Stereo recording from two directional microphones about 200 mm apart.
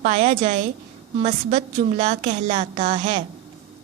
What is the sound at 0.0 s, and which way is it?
A woman's voice, 35° right (ahead or behind).